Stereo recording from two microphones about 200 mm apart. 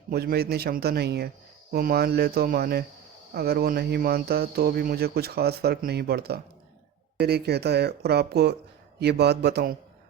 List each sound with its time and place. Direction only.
0.1 s speech: 50° right (ahead or behind)